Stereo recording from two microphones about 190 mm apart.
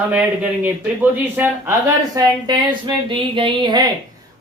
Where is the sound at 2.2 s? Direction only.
25° right (ahead or behind).